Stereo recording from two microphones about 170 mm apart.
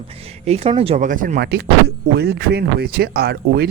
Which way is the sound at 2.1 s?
75° right (ahead or behind).